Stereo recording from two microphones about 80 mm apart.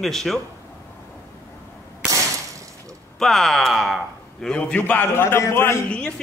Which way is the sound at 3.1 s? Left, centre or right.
Centre.